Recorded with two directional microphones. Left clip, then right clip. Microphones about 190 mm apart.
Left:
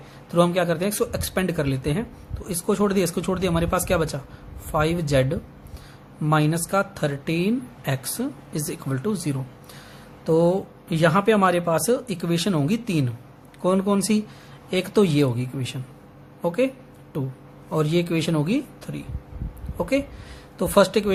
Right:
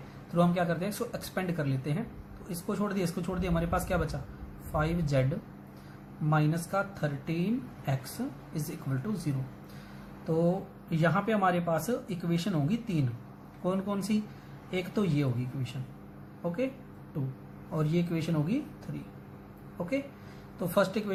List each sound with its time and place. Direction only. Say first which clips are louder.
0.3 s speech: left 8 dB; 45° left (ahead or behind)
6.3 s speech: left 9 dB; 50° left (ahead or behind)
17.7 s speech: left 10 dB; 50° left (ahead or behind)
20.6 s speech: left 10 dB; 45° left (ahead or behind)